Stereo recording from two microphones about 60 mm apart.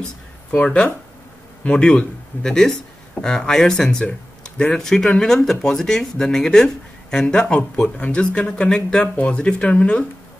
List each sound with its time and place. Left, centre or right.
0.5 s speech: centre